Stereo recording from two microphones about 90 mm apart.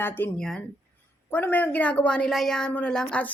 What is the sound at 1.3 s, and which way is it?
A woman's voice, 15° left (ahead or behind).